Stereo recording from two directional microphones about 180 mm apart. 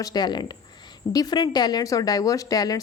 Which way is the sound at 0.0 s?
20° left (ahead or behind).